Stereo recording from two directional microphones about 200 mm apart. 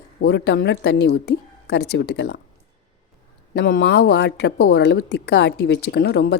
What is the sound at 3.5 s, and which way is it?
A woman's voice, 50° left (ahead or behind).